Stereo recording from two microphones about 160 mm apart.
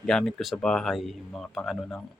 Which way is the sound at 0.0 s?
5° left (ahead or behind).